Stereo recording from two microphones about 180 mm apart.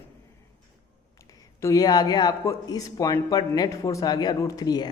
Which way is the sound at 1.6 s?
20° left (ahead or behind).